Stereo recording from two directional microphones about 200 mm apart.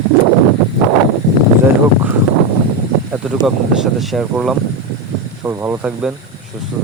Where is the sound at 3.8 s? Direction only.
Centre (ahead or behind).